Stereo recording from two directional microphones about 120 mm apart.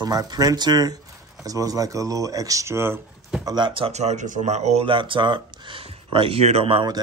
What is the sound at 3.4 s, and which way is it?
Speech, 40° right (ahead or behind).